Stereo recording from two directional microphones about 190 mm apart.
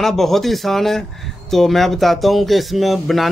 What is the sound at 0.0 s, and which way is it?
Speech, centre (ahead or behind).